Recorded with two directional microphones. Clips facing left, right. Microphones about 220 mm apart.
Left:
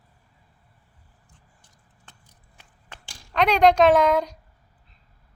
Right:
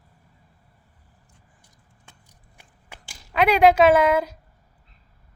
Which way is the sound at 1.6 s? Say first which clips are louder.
Right 1 dB; 10° right (ahead or behind).